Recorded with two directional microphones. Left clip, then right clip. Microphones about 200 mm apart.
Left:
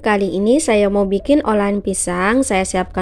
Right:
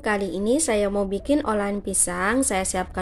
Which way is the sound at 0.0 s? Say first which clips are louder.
Left 8 dB; 40° left (ahead or behind).